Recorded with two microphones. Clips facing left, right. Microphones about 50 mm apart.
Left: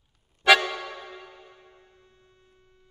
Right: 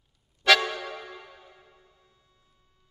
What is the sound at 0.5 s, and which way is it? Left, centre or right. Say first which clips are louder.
Music: left 2 dB; centre.